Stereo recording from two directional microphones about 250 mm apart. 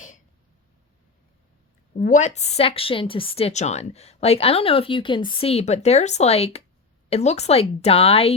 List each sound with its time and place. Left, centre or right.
2.0 s a woman's voice: left